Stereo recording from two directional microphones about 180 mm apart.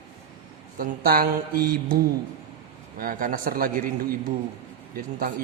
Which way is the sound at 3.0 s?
50° right (ahead or behind).